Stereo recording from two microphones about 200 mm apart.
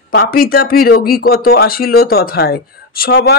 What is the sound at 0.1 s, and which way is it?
Speech, 50° left (ahead or behind).